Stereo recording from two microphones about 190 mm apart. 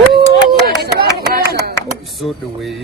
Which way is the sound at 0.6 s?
55° right (ahead or behind).